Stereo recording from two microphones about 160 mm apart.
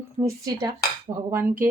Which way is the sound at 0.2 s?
20° right (ahead or behind).